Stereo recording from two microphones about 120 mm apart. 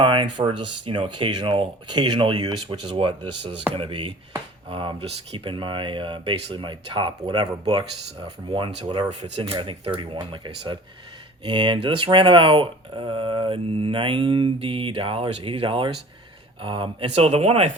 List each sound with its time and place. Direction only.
0.0 s speech: 45° right (ahead or behind)